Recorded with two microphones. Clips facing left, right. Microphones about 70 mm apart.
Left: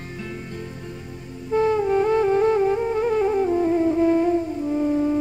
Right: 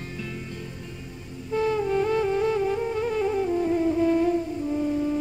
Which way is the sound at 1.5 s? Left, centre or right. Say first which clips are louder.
Left 5 dB; left.